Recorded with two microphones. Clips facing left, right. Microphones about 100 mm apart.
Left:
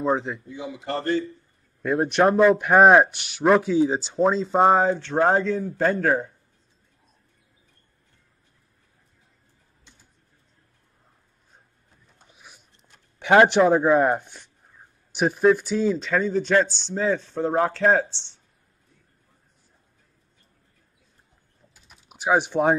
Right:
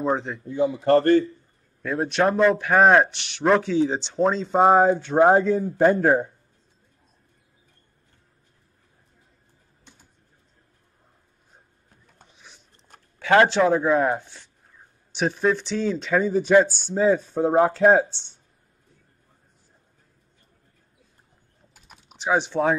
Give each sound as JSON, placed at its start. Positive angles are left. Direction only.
{"t": 0.0, "sound": "speech", "side_deg": 0}
{"t": 0.5, "sound": "speech", "side_deg": -50}
{"t": 2.2, "sound": "speech", "side_deg": 0}
{"t": 2.5, "sound": "speech", "side_deg": 15}
{"t": 13.2, "sound": "speech", "side_deg": 20}
{"t": 22.1, "sound": "speech", "side_deg": 10}